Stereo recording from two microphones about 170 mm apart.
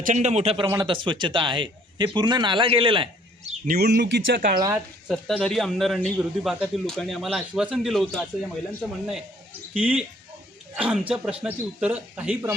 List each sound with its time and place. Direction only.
0.0 s a man's voice: 45° right (ahead or behind)
3.7 s speech: 75° right (ahead or behind)
4.4 s speech: 55° right (ahead or behind)
4.7 s a man's voice: centre (ahead or behind)
9.7 s a man's voice: 5° right (ahead or behind)